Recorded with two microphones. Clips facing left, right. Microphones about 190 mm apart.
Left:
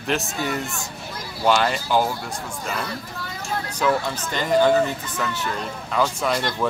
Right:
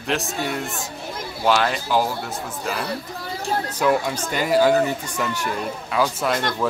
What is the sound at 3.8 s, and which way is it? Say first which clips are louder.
A man's voice: right 1 dB; 10° right (ahead or behind).